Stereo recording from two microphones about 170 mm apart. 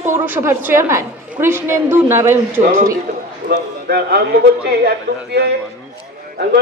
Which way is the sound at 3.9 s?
70° right (ahead or behind).